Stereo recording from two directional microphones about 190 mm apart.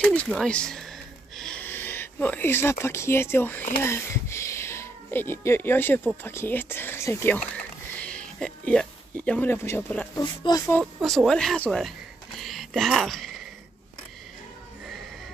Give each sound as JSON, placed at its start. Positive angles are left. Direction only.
{"t": 0.0, "sound": "speech", "side_deg": 5}
{"t": 10.2, "sound": "speech", "side_deg": 25}
{"t": 11.0, "sound": "speech", "side_deg": 0}
{"t": 12.4, "sound": "a sound", "side_deg": 0}